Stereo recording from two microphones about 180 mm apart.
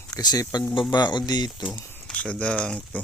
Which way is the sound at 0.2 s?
25° left (ahead or behind).